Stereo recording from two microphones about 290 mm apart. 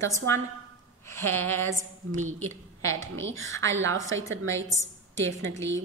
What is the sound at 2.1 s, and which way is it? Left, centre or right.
A woman's voice, right.